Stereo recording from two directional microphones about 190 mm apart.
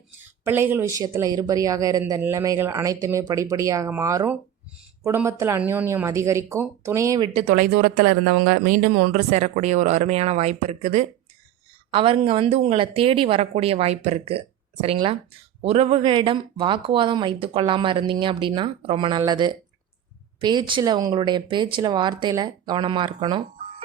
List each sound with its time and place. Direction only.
0.2 s speech: 10° right (ahead or behind)
7.3 s speech: 40° right (ahead or behind); by 23.4 s 25° right (ahead or behind)